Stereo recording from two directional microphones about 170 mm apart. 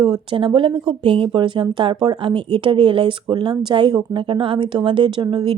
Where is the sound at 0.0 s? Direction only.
25° right (ahead or behind).